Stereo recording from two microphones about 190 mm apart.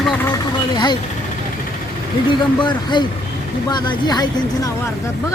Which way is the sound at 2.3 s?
25° left (ahead or behind).